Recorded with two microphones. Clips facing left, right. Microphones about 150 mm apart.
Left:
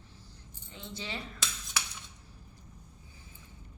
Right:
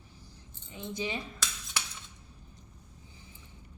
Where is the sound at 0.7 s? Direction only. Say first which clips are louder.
Right 6 dB; 15° right (ahead or behind).